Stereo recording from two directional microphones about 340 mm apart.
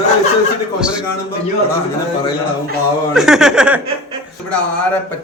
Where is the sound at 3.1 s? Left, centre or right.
Centre.